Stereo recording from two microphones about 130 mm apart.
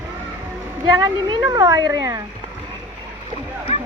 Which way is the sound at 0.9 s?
25° right (ahead or behind).